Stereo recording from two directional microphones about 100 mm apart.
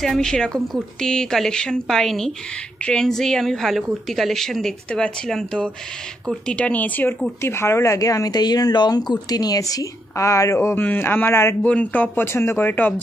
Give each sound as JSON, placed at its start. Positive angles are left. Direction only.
{"t": 0.0, "sound": "a woman's voice", "side_deg": 5}
{"t": 11.6, "sound": "speech", "side_deg": 15}